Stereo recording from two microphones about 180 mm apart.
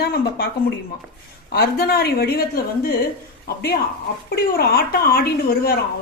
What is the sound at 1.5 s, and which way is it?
Speech, 60° left (ahead or behind).